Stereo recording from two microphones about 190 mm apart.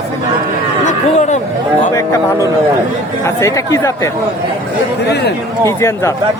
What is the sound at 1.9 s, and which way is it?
Speech, 15° left (ahead or behind).